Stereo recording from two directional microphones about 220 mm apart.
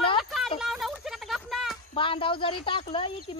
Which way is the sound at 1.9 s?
25° left (ahead or behind).